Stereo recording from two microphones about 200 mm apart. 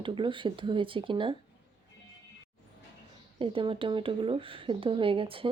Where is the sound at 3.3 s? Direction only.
25° right (ahead or behind).